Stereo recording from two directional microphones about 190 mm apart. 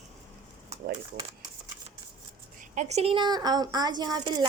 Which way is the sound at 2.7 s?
35° right (ahead or behind).